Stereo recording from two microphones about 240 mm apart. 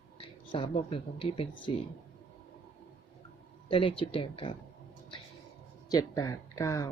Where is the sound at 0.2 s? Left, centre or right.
Left.